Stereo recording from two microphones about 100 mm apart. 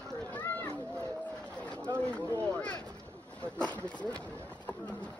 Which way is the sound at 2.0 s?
15° left (ahead or behind).